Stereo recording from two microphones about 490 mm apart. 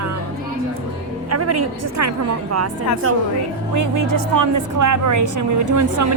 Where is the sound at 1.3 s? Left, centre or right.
Right.